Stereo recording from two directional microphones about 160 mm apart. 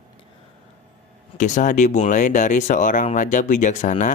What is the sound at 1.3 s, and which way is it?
Speech, 50° left (ahead or behind).